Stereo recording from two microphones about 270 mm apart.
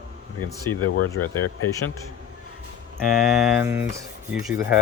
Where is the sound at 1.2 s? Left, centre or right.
Left.